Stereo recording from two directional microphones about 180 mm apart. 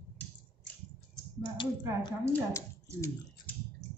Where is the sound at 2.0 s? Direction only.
20° left (ahead or behind).